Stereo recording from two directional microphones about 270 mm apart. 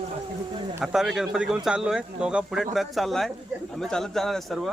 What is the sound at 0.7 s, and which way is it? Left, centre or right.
Speech, centre.